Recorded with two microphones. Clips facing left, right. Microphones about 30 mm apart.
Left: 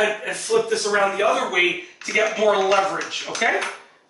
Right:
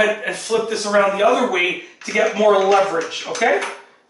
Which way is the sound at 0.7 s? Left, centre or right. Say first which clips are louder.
Right 3 dB; centre.